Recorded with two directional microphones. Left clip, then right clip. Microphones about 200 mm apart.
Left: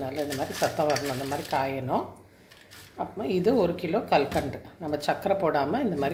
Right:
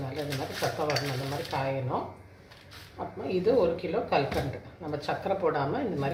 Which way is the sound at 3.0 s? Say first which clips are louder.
Left 3 dB; 55° left (ahead or behind).